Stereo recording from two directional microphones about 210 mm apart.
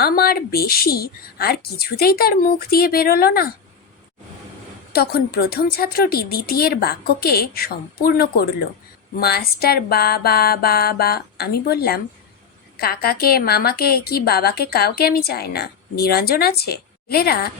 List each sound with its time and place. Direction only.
0.0 s a woman's voice: 45° left (ahead or behind)
4.9 s a woman's voice: 45° left (ahead or behind)